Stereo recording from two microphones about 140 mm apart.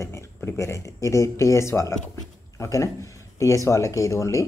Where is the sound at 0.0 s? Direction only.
20° left (ahead or behind).